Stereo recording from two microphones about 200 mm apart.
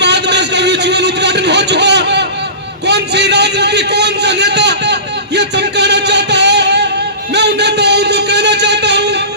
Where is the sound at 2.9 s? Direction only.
55° right (ahead or behind).